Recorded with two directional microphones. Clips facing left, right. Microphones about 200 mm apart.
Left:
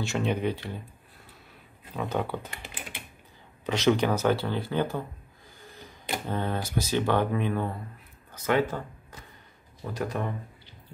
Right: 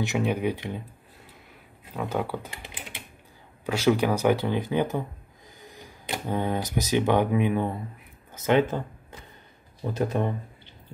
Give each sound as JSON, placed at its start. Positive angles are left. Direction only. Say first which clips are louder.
{"t": 0.0, "sound": "speech", "louder": "right 2 dB", "side_deg": -15}
{"t": 2.0, "sound": "speech", "louder": "right 1 dB", "side_deg": -10}